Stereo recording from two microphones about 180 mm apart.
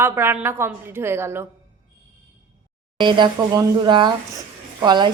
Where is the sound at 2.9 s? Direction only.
25° right (ahead or behind).